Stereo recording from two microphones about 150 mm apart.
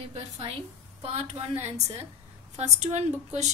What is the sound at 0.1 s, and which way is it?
A woman's voice, 40° right (ahead or behind).